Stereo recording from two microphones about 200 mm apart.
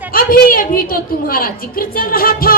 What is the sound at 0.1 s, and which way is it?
A woman's voice, 45° left (ahead or behind).